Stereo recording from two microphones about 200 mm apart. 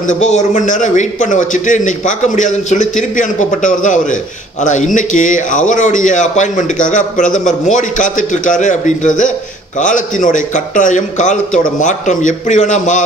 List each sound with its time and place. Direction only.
0.0 s a man's voice: 35° left (ahead or behind)